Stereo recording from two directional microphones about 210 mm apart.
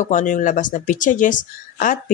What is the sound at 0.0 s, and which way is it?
Speech, 35° left (ahead or behind).